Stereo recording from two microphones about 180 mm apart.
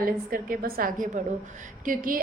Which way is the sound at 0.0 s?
55° right (ahead or behind).